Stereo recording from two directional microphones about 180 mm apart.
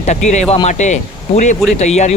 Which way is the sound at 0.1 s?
40° left (ahead or behind).